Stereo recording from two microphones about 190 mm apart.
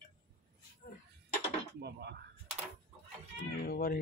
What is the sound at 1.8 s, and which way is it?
Speech, 60° right (ahead or behind).